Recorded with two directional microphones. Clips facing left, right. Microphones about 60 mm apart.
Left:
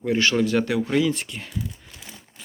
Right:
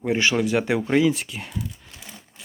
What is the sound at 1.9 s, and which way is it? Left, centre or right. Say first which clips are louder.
Crumpling: even; centre.